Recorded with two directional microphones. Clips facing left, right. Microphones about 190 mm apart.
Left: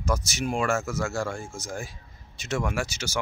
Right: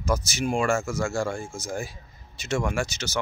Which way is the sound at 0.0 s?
Centre (ahead or behind).